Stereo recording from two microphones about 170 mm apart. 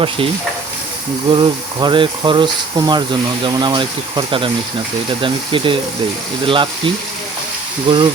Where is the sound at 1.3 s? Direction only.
30° right (ahead or behind).